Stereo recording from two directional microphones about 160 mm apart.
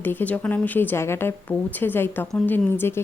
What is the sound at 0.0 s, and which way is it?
A woman's voice, 10° left (ahead or behind).